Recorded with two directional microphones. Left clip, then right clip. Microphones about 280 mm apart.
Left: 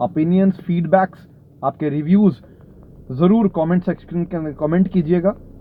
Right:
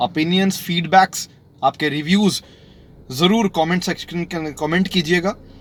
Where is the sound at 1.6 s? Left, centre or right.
Right.